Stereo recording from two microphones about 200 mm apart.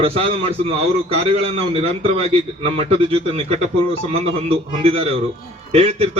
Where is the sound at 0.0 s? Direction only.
30° right (ahead or behind).